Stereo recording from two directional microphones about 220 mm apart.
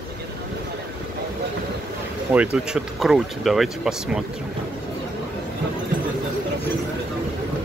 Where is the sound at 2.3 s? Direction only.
5° right (ahead or behind).